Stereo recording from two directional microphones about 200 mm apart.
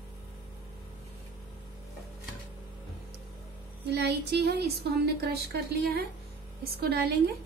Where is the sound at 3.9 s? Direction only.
55° right (ahead or behind).